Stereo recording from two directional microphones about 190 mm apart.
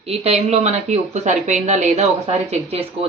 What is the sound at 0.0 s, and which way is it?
A woman's voice, 30° right (ahead or behind).